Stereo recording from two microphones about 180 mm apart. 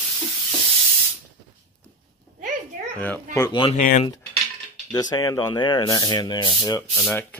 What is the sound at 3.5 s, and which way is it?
Speech, 30° left (ahead or behind).